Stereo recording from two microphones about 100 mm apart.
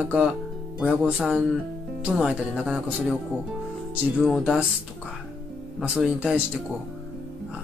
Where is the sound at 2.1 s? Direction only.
5° right (ahead or behind).